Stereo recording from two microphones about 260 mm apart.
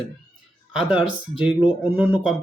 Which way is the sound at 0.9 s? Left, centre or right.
Centre.